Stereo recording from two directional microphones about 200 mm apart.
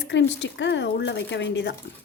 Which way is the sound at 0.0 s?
60° left (ahead or behind).